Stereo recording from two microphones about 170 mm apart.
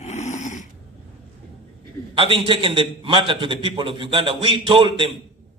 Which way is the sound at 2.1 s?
30° right (ahead or behind).